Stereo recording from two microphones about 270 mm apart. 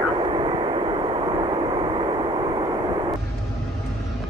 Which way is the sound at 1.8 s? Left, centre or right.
Centre.